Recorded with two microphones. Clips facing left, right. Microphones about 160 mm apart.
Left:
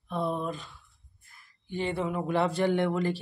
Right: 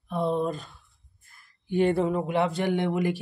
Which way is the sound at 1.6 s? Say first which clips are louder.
Right 9 dB; 55° right (ahead or behind).